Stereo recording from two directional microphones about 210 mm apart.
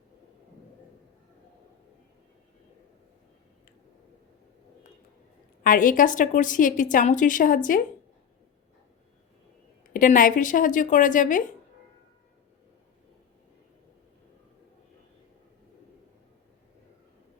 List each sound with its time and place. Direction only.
5.6 s a woman's voice: 40° left (ahead or behind)
9.9 s a woman's voice: 40° left (ahead or behind)